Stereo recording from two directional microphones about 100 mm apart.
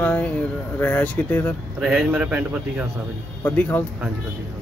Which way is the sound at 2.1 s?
10° right (ahead or behind).